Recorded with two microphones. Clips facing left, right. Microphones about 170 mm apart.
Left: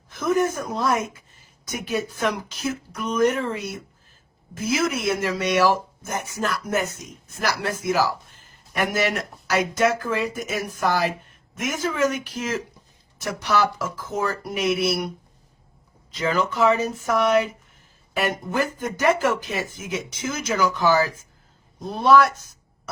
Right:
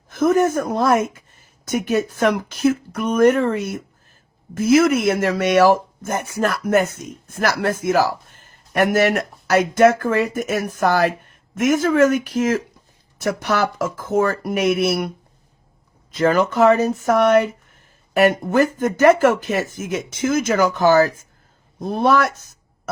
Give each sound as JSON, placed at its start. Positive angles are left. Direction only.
{"t": 0.1, "sound": "speech", "side_deg": -55}
{"t": 16.1, "sound": "speech", "side_deg": -55}